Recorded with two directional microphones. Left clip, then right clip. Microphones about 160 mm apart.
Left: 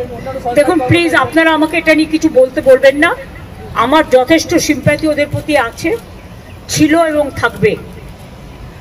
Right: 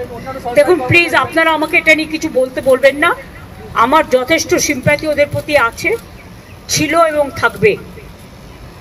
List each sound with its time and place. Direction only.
0.6 s a woman's voice: 30° right (ahead or behind)